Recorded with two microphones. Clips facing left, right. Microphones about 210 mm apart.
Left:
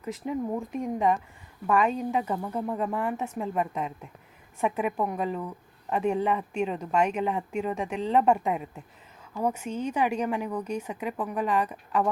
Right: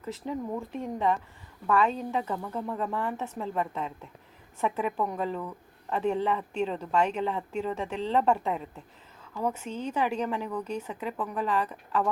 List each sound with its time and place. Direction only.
0.0 s speech: 10° left (ahead or behind)